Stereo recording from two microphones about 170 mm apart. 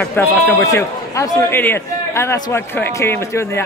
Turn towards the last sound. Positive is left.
turn(degrees=15)  # may be behind; listen again after turning